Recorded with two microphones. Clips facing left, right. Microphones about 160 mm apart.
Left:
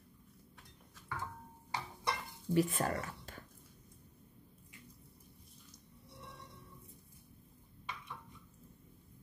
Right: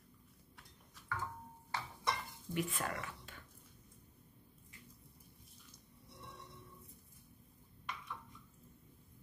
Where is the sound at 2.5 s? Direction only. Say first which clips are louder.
Left 7 dB; 35° left (ahead or behind).